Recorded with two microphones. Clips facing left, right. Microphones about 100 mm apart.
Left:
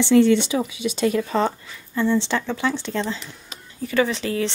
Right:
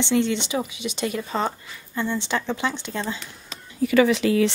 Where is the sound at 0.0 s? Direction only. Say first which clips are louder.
Left 7 dB; 20° right (ahead or behind).